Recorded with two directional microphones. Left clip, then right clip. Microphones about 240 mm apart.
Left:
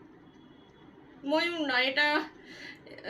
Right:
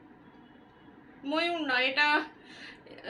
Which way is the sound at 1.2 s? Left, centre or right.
Centre.